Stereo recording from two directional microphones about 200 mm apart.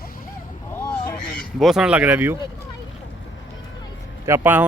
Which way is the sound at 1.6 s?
Centre (ahead or behind).